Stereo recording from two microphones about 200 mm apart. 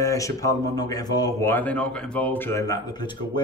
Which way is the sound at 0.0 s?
15° left (ahead or behind).